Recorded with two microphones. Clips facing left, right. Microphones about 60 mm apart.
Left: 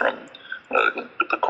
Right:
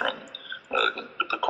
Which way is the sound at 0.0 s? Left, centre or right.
Left.